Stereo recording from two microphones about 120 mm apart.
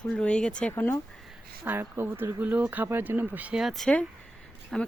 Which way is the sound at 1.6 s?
20° right (ahead or behind).